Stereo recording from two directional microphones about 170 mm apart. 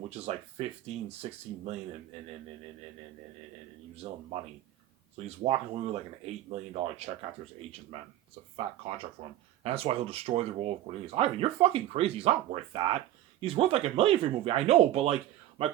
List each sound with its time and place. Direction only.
0.1 s speech: 40° right (ahead or behind)
3.9 s speech: 40° right (ahead or behind)
5.4 s speech: 35° right (ahead or behind)
9.2 s speech: 35° right (ahead or behind)